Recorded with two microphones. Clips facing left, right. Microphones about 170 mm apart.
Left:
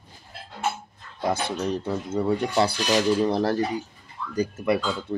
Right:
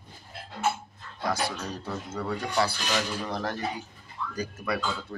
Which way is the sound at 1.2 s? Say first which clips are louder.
Left 5 dB; 25° left (ahead or behind).